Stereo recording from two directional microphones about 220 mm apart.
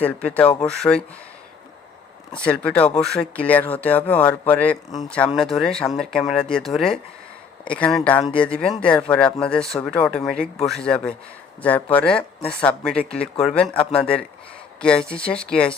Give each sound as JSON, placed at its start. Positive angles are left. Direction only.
{"t": 0.0, "sound": "speech", "side_deg": 5}
{"t": 2.3, "sound": "speech", "side_deg": 5}